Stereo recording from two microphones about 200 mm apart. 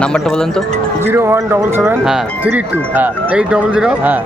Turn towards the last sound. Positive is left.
turn(degrees=-5)  # may be behind; listen again after turning